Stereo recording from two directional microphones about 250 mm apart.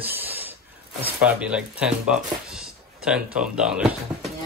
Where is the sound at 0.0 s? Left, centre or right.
Centre.